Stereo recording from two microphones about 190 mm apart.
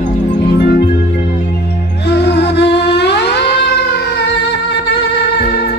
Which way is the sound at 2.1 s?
60° left (ahead or behind).